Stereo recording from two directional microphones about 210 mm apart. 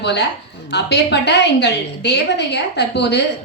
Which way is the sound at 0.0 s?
55° left (ahead or behind).